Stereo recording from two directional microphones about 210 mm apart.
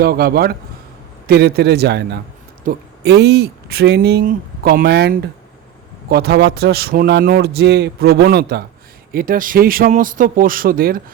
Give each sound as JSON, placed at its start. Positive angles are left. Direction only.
{"t": 0.0, "sound": "a man's voice", "side_deg": -45}